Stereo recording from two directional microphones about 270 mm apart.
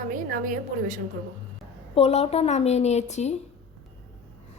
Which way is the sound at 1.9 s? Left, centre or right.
Left.